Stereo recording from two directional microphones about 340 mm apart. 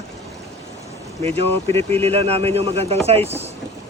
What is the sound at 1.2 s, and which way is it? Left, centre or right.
Speech, centre.